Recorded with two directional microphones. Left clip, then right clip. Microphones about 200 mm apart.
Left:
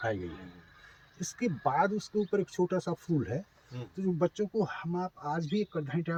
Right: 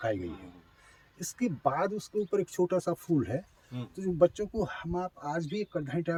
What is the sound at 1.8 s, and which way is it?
Speech, 60° right (ahead or behind).